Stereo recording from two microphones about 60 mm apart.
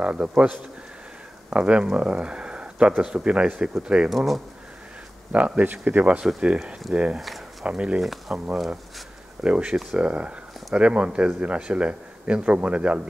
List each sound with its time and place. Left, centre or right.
0.0 s speech: centre
1.5 s speech: centre
4.1 s speech: centre
5.3 s speech: right
6.4 s speech: centre
7.2 s a sound: centre
7.6 s speech: centre
8.0 s speech: centre
9.4 s speech: centre